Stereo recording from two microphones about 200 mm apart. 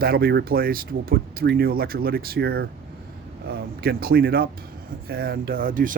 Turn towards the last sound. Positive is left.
turn(degrees=-40)  # may be behind; listen again after turning